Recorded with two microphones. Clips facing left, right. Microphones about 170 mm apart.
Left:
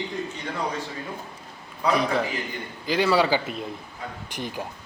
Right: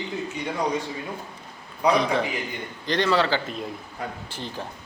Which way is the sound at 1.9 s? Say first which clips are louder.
Right 1 dB; centre (ahead or behind).